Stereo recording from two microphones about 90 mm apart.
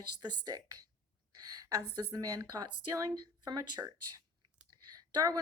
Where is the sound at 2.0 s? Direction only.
40° right (ahead or behind).